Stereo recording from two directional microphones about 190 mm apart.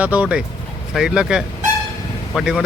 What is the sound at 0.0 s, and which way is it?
Speech, 5° right (ahead or behind).